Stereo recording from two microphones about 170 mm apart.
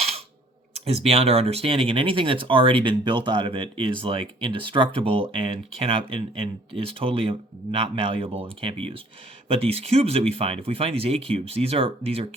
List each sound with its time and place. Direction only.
0.7 s speech: 35° right (ahead or behind)